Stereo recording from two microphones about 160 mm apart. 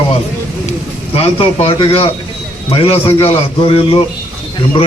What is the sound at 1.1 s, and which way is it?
A man's voice, 40° left (ahead or behind).